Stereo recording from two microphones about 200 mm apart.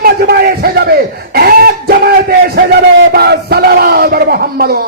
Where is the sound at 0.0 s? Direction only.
50° right (ahead or behind).